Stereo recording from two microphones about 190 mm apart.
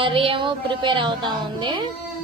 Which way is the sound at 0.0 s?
30° right (ahead or behind).